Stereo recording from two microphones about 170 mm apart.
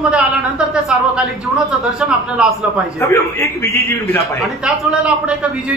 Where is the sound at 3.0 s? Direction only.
15° left (ahead or behind).